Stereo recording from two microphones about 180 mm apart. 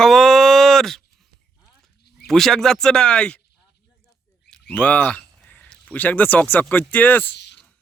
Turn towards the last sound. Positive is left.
turn(degrees=10)  # may be behind; listen again after turning